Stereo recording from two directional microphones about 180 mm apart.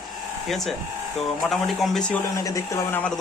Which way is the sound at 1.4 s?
5° left (ahead or behind).